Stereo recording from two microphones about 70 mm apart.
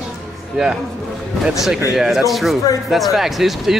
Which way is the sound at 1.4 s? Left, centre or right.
Centre.